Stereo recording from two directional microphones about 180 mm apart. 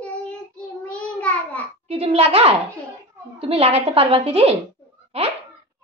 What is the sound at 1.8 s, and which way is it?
A woman's voice, 30° right (ahead or behind).